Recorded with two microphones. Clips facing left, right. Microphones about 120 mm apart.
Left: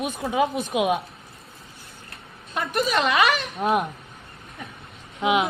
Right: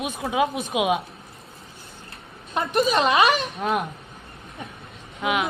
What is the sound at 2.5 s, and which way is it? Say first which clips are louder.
Speech: right 3 dB; 25° right (ahead or behind).